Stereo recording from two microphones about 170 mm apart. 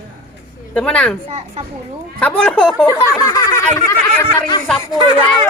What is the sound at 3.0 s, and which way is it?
A child's voice, 20° left (ahead or behind).